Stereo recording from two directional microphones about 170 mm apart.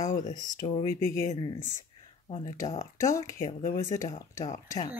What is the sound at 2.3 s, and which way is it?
Speech, 30° left (ahead or behind).